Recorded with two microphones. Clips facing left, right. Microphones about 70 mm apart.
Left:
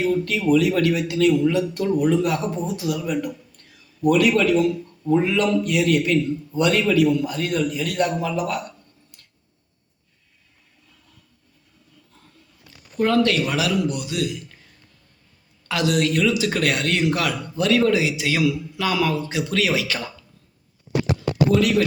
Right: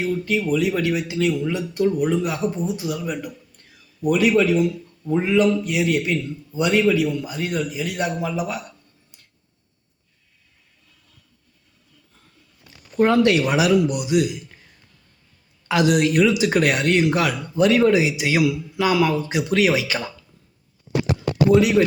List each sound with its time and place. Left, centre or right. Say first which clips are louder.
0.0 s a man's voice: left 1 dB; centre
9.1 s a sound: left 1 dB; centre
13.0 s a man's voice: right 3 dB; right
15.7 s a man's voice: right 3 dB; centre
21.5 s speech: right 4 dB; centre